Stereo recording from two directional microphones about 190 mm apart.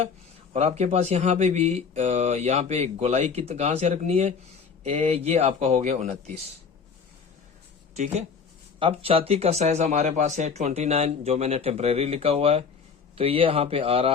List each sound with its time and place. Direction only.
0.5 s speech: 35° right (ahead or behind)
7.9 s speech: 40° right (ahead or behind)